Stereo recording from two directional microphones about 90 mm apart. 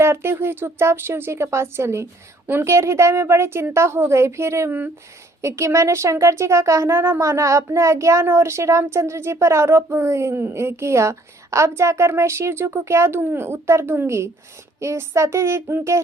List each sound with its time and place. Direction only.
0.0 s a woman's voice: 30° right (ahead or behind)